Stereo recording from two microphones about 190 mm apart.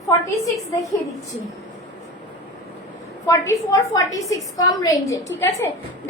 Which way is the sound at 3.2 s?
15° left (ahead or behind).